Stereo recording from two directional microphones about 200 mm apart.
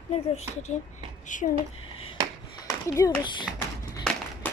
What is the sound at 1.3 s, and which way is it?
Speech, 40° left (ahead or behind).